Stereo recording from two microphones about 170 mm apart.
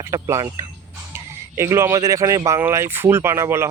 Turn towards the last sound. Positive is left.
turn(degrees=-15)  # may be behind; listen again after turning